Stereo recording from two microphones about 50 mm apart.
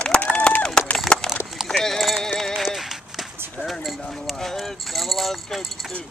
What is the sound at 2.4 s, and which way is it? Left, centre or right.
Run, centre.